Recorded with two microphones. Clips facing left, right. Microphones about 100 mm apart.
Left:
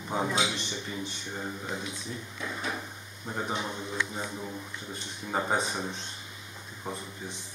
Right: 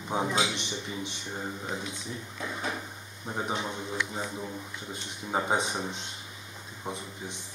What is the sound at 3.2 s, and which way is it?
Speech, 10° right (ahead or behind).